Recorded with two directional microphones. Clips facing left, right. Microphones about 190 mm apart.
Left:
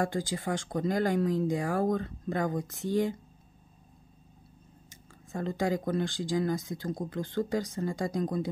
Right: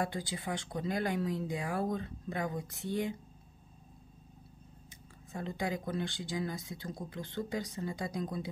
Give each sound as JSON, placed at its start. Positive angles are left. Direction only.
{"t": 0.0, "sound": "speech", "side_deg": 45}
{"t": 5.3, "sound": "speech", "side_deg": 45}